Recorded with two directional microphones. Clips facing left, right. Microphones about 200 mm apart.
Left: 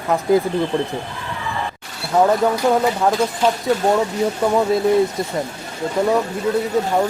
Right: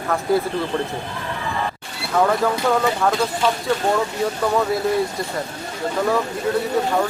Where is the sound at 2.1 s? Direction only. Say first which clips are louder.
Left 3 dB; 25° left (ahead or behind).